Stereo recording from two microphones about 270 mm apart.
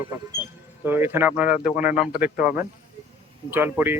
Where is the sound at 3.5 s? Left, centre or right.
Centre.